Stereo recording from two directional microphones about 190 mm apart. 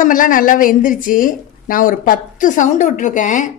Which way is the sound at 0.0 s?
45° left (ahead or behind).